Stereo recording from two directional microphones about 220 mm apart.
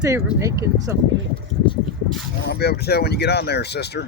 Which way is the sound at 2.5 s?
45° left (ahead or behind).